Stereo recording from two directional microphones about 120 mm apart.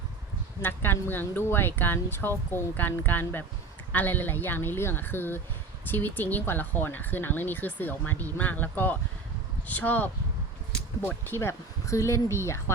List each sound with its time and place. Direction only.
0.6 s speech: 15° left (ahead or behind)
11.3 s speech: 20° left (ahead or behind)